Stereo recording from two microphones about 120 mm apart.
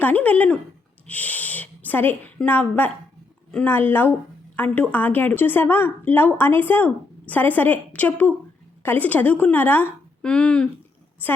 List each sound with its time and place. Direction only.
0.0 s a woman's voice: 15° left (ahead or behind)